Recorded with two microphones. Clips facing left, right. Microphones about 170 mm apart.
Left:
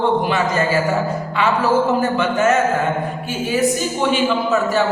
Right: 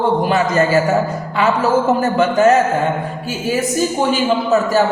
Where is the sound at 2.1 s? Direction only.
35° right (ahead or behind).